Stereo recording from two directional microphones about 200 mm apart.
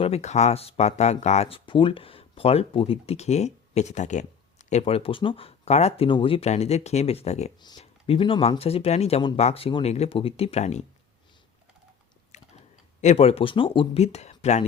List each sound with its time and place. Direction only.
0.0 s speech: 30° left (ahead or behind)
12.3 s speech: 35° left (ahead or behind)